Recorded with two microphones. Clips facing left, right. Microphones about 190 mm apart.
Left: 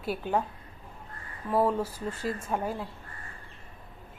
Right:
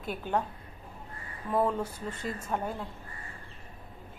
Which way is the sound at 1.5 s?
5° left (ahead or behind).